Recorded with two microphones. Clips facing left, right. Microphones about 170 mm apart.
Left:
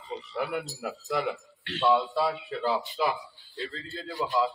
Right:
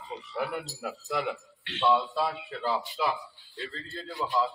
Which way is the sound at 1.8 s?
Centre (ahead or behind).